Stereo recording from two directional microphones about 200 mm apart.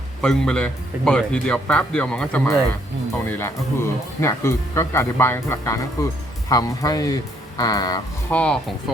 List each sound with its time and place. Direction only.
0.2 s speech: 5° left (ahead or behind)
8.3 s speech: 5° left (ahead or behind)